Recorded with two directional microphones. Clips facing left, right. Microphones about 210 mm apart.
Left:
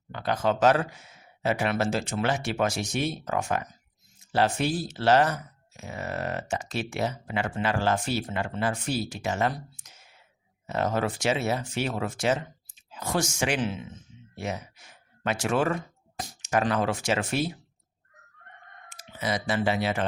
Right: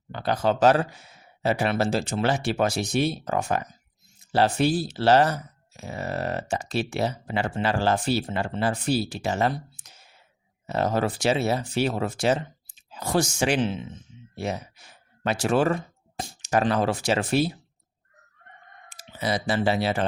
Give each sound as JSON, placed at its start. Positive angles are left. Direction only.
{"t": 0.1, "sound": "speech", "side_deg": -35}
{"t": 18.9, "sound": "speech", "side_deg": -35}